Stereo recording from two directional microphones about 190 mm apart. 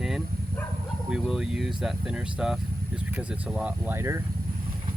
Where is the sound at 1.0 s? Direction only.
Centre (ahead or behind).